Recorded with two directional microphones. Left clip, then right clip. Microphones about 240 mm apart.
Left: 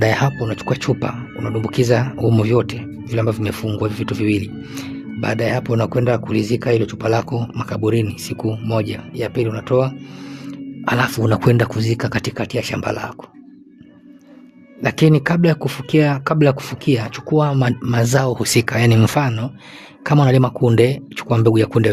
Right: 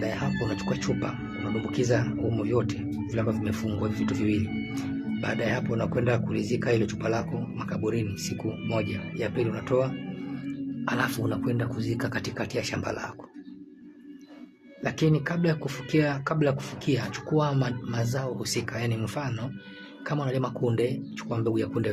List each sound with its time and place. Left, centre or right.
0.0 s speech: left
0.3 s speech: left
11.4 s speech: left
14.8 s speech: left